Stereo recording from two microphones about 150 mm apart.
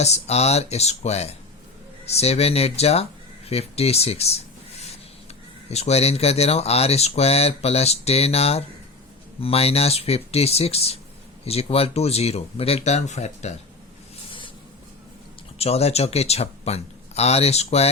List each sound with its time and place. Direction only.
0.0 s speech: 45° left (ahead or behind)
15.5 s speech: 40° left (ahead or behind)